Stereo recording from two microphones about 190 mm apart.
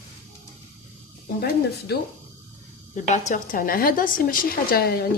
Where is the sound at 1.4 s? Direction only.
55° left (ahead or behind).